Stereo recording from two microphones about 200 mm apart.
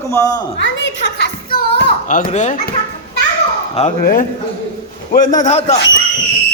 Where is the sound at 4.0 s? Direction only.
45° left (ahead or behind).